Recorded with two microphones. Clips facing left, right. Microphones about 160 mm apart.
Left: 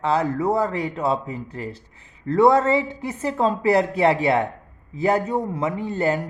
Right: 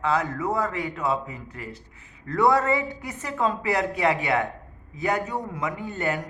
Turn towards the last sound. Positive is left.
turn(degrees=30)  # may be behind; listen again after turning